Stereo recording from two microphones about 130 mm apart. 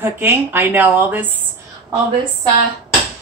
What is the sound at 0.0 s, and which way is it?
A woman's voice, 15° right (ahead or behind).